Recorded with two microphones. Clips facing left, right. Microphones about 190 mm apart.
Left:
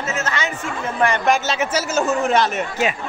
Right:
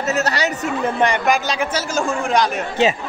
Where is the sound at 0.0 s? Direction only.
40° right (ahead or behind).